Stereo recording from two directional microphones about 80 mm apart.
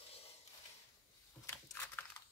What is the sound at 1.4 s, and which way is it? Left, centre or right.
Crushing, left.